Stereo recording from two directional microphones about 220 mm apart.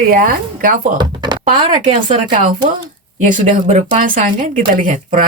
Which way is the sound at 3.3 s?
35° right (ahead or behind).